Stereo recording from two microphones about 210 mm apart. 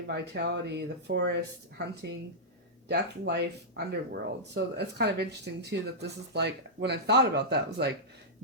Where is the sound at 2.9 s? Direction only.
50° right (ahead or behind).